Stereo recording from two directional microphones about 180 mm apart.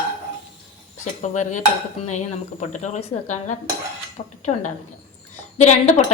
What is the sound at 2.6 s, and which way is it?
Dishes, 40° left (ahead or behind).